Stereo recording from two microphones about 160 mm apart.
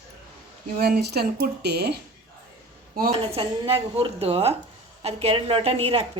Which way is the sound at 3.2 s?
35° right (ahead or behind).